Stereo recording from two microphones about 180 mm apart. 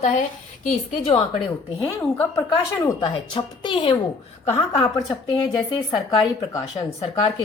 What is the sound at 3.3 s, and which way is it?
A woman's voice, 25° left (ahead or behind).